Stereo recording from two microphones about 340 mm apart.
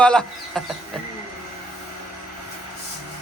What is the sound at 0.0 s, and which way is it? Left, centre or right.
Speech, centre.